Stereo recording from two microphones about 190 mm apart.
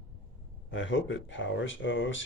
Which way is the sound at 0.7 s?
75° left (ahead or behind).